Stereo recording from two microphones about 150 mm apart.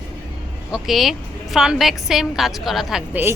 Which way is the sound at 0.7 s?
Centre (ahead or behind).